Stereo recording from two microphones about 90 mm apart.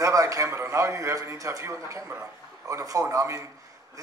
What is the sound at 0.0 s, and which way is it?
A man's voice, 40° right (ahead or behind).